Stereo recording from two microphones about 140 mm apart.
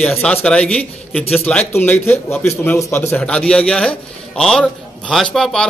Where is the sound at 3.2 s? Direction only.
5° left (ahead or behind).